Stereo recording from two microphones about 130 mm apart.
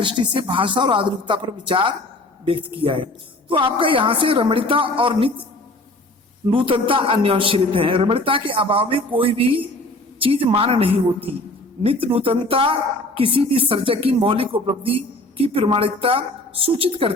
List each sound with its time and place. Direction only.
0.0 s speech: 40° right (ahead or behind)
6.5 s speech: 45° right (ahead or behind)